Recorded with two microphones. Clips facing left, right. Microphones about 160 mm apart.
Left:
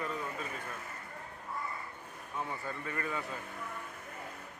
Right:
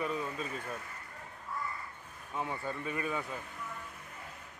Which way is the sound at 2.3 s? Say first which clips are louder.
Right 2 dB; 15° right (ahead or behind).